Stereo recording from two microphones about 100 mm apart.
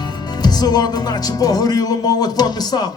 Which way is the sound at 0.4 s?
40° left (ahead or behind).